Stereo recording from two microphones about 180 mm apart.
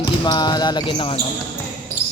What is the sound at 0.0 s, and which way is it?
Speech, 25° left (ahead or behind).